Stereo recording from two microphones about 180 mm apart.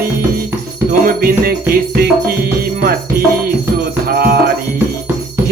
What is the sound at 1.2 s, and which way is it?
Music, 55° right (ahead or behind).